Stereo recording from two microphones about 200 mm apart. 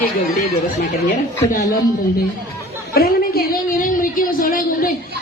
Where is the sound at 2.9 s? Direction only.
50° left (ahead or behind).